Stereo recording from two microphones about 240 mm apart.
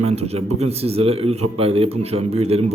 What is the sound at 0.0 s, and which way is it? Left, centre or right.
A man's voice, right.